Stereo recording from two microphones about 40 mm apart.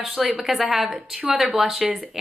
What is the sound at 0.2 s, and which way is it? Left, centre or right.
A woman's voice, centre.